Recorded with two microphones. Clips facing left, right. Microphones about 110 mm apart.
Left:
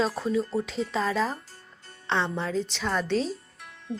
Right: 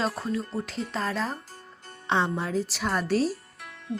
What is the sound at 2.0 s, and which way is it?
A woman's voice, 15° right (ahead or behind).